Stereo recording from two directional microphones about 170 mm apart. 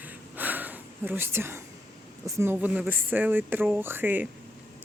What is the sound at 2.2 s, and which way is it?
Speech, 15° right (ahead or behind).